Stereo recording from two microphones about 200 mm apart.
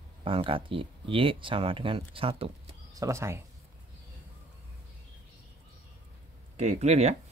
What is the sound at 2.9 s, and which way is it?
Speech, 15° right (ahead or behind).